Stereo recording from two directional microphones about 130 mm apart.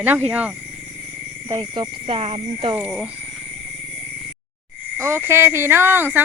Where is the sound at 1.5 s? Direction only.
35° right (ahead or behind).